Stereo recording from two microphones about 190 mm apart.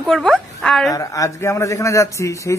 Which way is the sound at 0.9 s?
15° left (ahead or behind).